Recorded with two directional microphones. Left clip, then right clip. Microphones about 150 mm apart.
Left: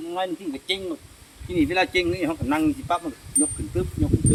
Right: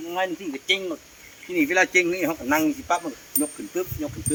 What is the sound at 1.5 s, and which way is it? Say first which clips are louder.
Speech: right 2 dB; 20° left (ahead or behind).